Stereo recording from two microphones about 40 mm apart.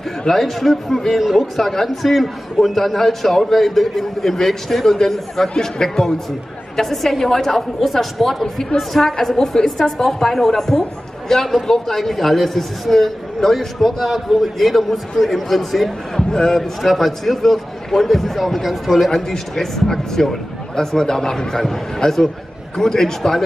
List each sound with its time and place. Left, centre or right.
0.3 s a man's voice: centre
1.2 s a man's voice: centre
1.6 s a man's voice: centre
16.2 s speech: centre
16.8 s speech: centre